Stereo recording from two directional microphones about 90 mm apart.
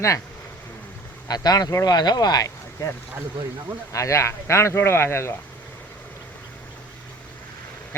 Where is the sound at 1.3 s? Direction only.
45° left (ahead or behind).